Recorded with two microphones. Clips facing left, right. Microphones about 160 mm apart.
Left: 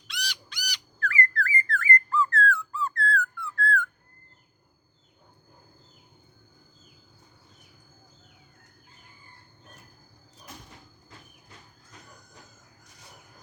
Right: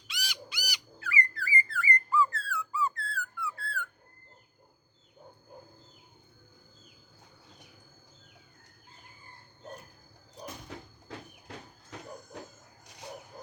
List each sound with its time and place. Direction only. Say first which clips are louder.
0.1 s squawk: left 3 dB; 5° right (ahead or behind)
10.7 s train: right 8 dB; 80° right